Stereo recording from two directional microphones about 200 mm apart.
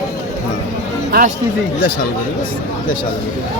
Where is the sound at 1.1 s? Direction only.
45° right (ahead or behind).